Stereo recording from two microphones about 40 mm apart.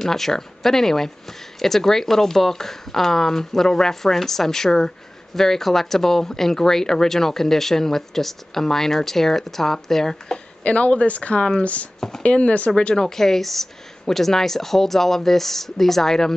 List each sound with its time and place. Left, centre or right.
0.0 s speech: centre
10.6 s speech: left
12.9 s speech: centre